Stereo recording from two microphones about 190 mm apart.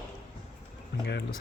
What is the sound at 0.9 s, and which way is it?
Speech, 60° left (ahead or behind).